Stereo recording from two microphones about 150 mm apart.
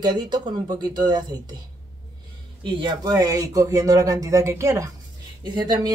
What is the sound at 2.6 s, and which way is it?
Speech, 35° right (ahead or behind).